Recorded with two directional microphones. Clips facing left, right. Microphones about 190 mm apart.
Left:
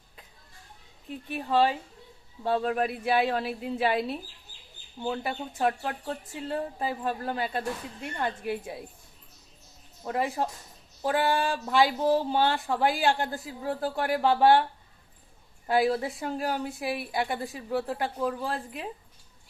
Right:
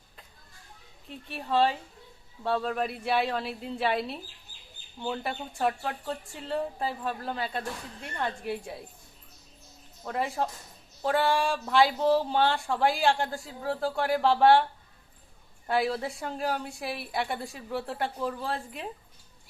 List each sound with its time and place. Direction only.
1.3 s a woman's voice: centre (ahead or behind)
10.0 s a woman's voice: 5° left (ahead or behind)